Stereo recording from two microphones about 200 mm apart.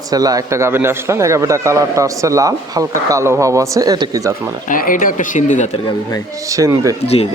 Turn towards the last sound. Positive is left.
turn(degrees=30)  # may be behind; listen again after turning